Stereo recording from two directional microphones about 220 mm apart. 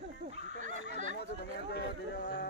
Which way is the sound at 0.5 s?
50° left (ahead or behind).